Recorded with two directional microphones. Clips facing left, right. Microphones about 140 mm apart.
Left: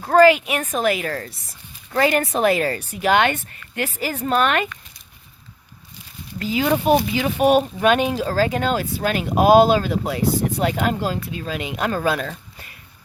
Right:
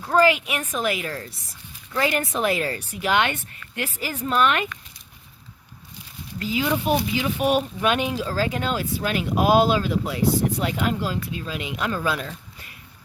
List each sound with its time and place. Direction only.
0.0 s speech: 45° left (ahead or behind)
6.5 s speech: 50° left (ahead or behind)